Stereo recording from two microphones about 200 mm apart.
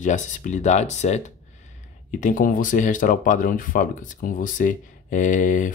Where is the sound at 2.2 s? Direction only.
40° left (ahead or behind).